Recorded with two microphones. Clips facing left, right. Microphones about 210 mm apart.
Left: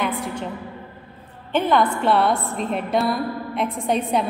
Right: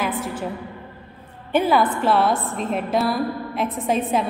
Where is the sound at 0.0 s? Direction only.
5° right (ahead or behind).